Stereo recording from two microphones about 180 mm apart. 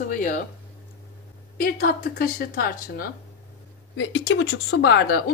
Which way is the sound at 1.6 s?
55° left (ahead or behind).